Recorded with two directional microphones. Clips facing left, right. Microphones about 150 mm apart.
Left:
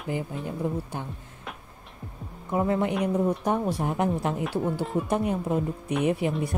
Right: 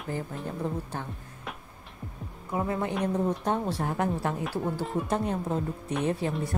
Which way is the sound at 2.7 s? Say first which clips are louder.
Left 3 dB; 20° left (ahead or behind).